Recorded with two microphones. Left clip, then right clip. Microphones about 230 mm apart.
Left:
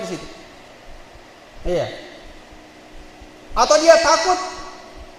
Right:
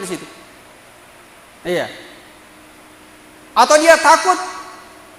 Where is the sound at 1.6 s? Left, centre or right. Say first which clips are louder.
Right 2 dB; right.